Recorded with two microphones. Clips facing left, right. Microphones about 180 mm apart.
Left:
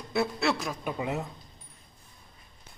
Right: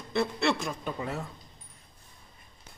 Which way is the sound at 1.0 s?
20° left (ahead or behind).